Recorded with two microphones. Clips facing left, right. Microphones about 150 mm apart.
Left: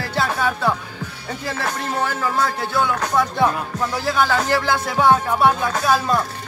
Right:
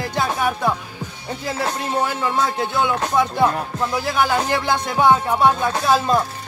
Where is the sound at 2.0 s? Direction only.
20° right (ahead or behind).